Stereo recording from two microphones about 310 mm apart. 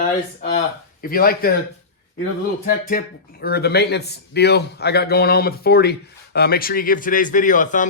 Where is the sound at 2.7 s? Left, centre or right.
Left.